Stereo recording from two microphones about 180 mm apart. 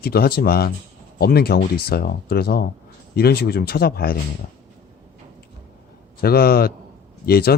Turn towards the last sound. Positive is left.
turn(degrees=55)  # may be behind; listen again after turning